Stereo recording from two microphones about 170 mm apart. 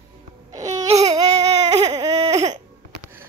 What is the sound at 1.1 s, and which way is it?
Baby cry, 20° right (ahead or behind).